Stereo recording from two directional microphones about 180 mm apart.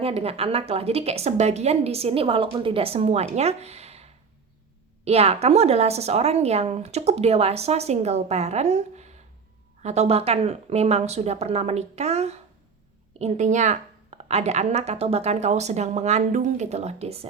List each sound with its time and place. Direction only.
0.0 s a woman's voice: 35° right (ahead or behind)